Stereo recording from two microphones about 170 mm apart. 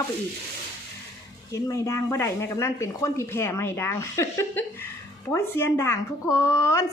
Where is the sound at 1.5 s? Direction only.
20° left (ahead or behind).